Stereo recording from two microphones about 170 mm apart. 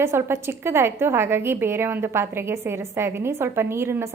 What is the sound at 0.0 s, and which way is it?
A woman's voice, 15° right (ahead or behind).